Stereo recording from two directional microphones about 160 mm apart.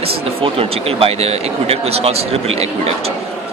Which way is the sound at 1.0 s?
40° right (ahead or behind).